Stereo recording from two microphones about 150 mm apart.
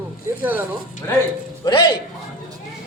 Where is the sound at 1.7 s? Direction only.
30° left (ahead or behind).